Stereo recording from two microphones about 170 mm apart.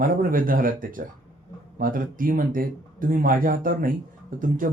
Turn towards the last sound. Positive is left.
turn(degrees=-55)  # may be behind; listen again after turning